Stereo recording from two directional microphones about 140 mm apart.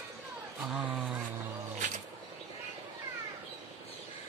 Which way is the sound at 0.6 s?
10° right (ahead or behind).